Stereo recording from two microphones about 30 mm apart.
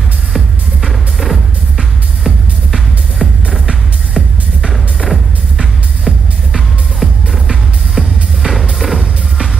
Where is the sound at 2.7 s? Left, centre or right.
Centre.